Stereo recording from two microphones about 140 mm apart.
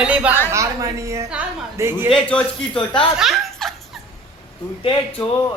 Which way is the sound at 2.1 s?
10° left (ahead or behind).